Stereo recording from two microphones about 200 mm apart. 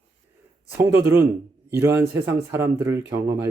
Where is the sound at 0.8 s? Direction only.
15° right (ahead or behind).